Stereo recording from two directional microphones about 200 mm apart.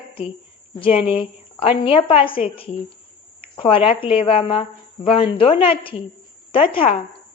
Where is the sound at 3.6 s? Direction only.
25° left (ahead or behind).